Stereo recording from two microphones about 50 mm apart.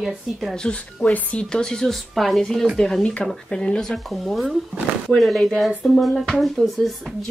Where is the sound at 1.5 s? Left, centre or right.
Centre.